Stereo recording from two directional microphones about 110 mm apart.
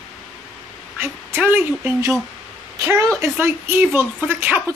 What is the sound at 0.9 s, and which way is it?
A woman's voice, 20° right (ahead or behind).